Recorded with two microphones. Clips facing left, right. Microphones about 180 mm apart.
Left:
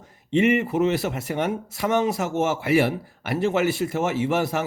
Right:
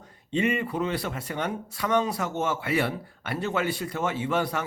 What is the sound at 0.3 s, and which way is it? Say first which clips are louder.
A man's voice: left 6 dB; 25° left (ahead or behind).